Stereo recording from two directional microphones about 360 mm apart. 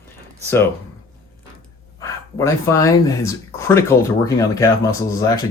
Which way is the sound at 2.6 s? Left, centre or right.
Centre.